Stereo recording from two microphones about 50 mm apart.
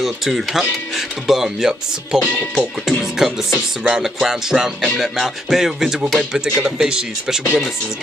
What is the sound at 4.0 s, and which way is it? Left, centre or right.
Speech, centre.